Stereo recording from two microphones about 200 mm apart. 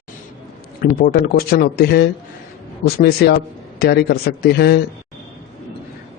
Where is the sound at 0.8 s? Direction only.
50° left (ahead or behind).